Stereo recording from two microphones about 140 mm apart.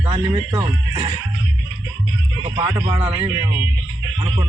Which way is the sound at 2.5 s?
30° right (ahead or behind).